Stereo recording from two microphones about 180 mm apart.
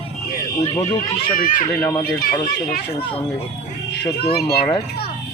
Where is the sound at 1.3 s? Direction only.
50° left (ahead or behind).